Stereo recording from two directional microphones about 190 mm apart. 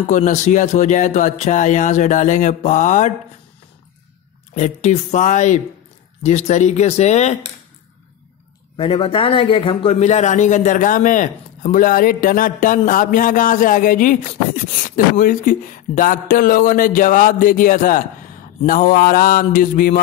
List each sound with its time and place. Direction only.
0.1 s speech: 40° left (ahead or behind)
4.6 s speech: 40° left (ahead or behind)
8.7 s a man's voice: 30° left (ahead or behind); by 20.0 s 45° left (ahead or behind)